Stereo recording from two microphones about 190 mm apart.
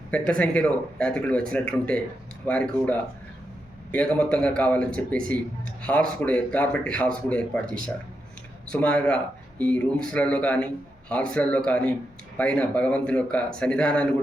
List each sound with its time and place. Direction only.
0.1 s a man's voice: 5° left (ahead or behind)